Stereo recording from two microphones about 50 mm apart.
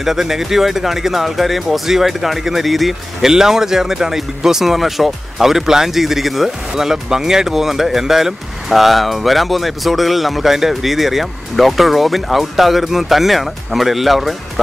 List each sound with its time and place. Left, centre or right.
0.0 s speech: centre